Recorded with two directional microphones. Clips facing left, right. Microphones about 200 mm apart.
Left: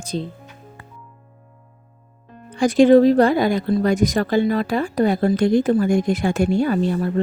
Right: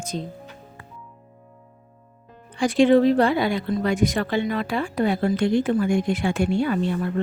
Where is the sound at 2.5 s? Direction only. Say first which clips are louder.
Left 4 dB; 40° left (ahead or behind).